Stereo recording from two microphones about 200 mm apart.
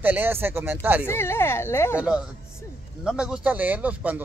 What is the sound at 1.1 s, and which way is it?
Speech, 10° left (ahead or behind).